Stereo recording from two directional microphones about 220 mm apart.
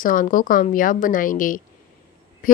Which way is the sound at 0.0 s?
40° left (ahead or behind).